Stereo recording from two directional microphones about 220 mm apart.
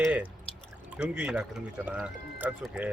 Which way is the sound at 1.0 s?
5° right (ahead or behind).